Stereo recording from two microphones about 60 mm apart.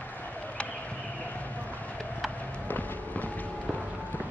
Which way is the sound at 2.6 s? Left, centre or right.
Left.